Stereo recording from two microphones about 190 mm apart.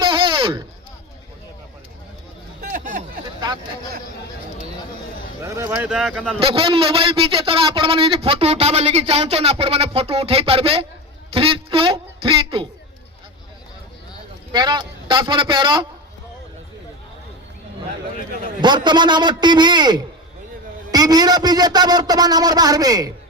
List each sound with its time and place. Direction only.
0.0 s a sound: 25° right (ahead or behind)
2.6 s a sound: 45° right (ahead or behind)
5.4 s speech: 15° right (ahead or behind); by 6.3 s centre (ahead or behind)
6.4 s a man's voice: 30° right (ahead or behind)
14.5 s a man's voice: 20° right (ahead or behind)
18.6 s a man's voice: 25° right (ahead or behind)